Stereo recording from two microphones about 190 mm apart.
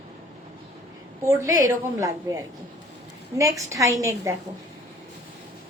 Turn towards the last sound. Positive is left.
turn(degrees=-15)  # may be behind; listen again after turning